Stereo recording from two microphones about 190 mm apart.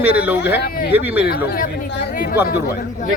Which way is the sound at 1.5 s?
50° left (ahead or behind).